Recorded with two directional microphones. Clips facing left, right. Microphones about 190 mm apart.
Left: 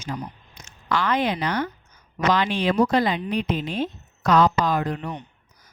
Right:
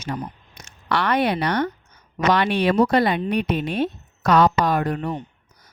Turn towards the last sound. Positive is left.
turn(degrees=-40)  # may be behind; listen again after turning